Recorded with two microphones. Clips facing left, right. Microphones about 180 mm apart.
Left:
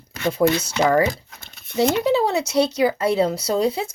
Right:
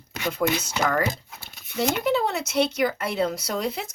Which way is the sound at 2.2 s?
30° left (ahead or behind).